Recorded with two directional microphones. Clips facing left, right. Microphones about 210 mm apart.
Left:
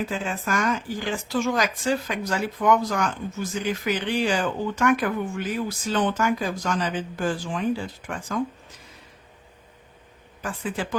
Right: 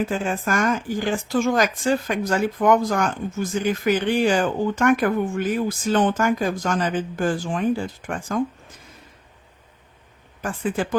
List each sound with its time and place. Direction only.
0.0 s speech: 50° right (ahead or behind)
10.4 s speech: 50° right (ahead or behind)